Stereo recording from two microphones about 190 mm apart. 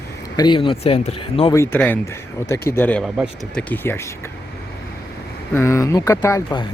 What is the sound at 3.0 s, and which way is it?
Speech, 5° right (ahead or behind).